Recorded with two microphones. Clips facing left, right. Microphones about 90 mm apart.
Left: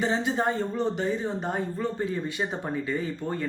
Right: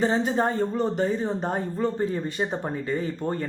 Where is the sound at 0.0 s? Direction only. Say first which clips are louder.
Right 3 dB; 40° right (ahead or behind).